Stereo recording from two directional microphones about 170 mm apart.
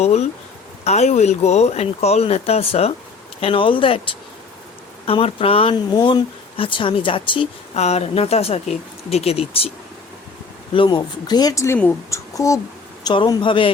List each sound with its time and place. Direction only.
0.0 s speech: 40° left (ahead or behind)
10.8 s a woman's voice: 25° left (ahead or behind)